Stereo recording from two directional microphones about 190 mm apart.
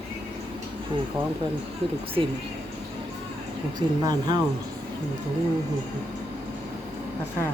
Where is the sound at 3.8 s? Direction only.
25° right (ahead or behind).